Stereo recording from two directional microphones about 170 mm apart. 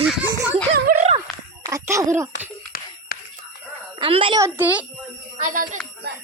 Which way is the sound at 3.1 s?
60° left (ahead or behind).